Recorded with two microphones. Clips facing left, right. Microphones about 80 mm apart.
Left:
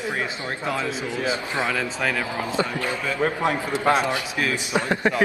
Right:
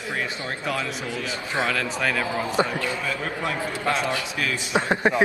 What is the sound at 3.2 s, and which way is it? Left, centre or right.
A man's voice, left.